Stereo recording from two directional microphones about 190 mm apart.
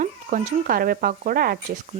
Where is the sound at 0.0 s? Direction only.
45° right (ahead or behind).